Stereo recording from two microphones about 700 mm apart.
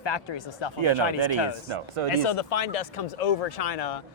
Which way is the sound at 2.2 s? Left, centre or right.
Left.